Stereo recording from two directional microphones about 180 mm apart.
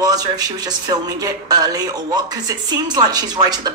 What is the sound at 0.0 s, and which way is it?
A woman's voice, 20° right (ahead or behind).